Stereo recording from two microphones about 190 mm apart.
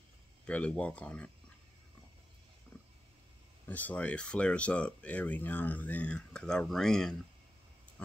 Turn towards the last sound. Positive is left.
turn(degrees=5)  # may be behind; listen again after turning